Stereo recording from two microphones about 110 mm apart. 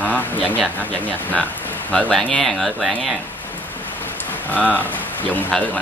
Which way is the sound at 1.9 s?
5° left (ahead or behind).